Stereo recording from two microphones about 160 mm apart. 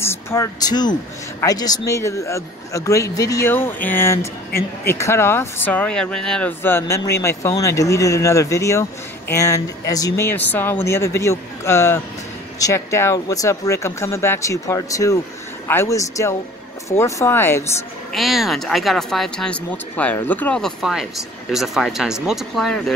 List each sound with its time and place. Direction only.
0.0 s a man's voice: 15° left (ahead or behind)
18.1 s speech: centre (ahead or behind)